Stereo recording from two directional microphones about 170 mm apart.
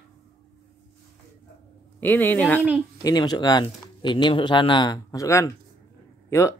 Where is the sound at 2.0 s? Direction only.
10° left (ahead or behind).